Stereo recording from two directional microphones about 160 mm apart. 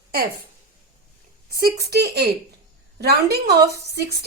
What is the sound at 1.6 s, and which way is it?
A woman's voice, 75° right (ahead or behind).